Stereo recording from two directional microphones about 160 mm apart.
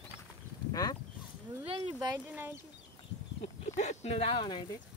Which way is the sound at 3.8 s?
45° left (ahead or behind).